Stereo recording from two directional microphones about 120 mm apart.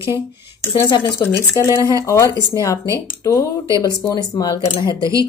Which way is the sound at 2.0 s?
25° left (ahead or behind).